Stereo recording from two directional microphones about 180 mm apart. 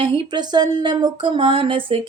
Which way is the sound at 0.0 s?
30° right (ahead or behind).